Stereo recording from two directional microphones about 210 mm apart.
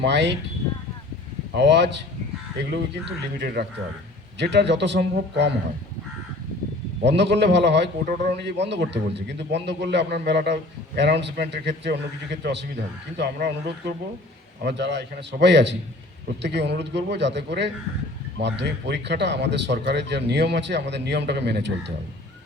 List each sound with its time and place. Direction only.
0.0 s a man's voice: 55° right (ahead or behind)
1.5 s a man's voice: 55° right (ahead or behind)
3.4 s a man's voice: 50° right (ahead or behind)
7.0 s a man's voice: 55° right (ahead or behind)